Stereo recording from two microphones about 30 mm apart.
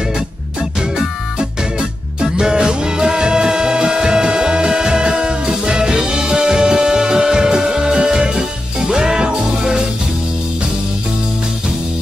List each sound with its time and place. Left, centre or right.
1.8 s music: right